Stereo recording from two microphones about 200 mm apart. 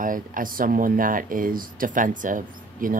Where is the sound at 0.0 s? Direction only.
45° right (ahead or behind).